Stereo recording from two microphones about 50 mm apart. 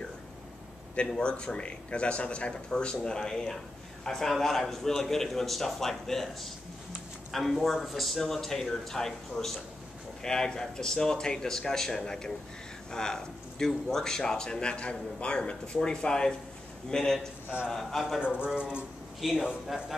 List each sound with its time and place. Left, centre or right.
0.9 s speech: centre
18.4 s a man's voice: right
19.2 s speech: centre